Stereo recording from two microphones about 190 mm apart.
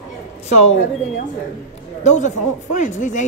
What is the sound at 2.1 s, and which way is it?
Speech, 40° left (ahead or behind).